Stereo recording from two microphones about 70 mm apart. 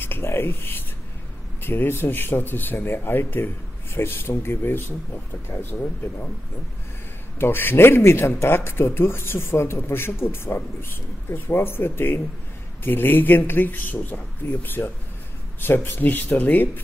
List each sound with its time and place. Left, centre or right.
0.0 s speech: left
7.3 s speech: left